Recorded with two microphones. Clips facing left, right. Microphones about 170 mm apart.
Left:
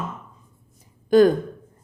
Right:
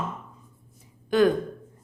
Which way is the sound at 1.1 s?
40° left (ahead or behind).